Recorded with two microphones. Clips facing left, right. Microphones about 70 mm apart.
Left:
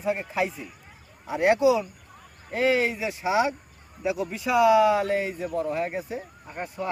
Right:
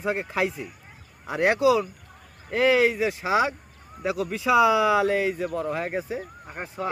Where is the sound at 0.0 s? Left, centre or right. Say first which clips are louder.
Right 1 dB; right.